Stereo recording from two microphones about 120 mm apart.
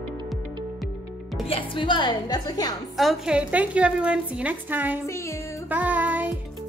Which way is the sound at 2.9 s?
5° right (ahead or behind).